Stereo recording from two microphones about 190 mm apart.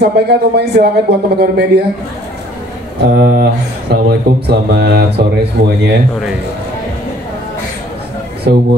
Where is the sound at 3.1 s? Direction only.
55° right (ahead or behind).